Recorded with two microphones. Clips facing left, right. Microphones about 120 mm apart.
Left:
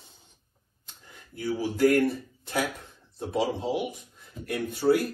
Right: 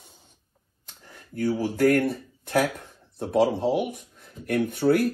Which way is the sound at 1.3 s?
55° right (ahead or behind).